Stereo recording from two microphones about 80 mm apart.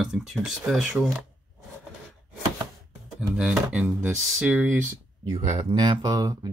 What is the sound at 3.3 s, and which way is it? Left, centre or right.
Speech, centre.